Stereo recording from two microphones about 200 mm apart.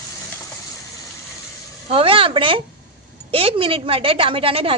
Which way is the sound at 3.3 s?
25° right (ahead or behind).